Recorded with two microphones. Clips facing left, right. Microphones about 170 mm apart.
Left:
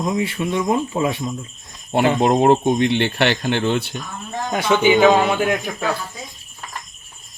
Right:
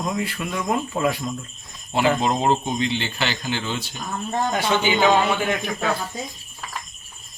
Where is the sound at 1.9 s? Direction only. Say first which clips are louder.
Left 4 dB; 60° left (ahead or behind).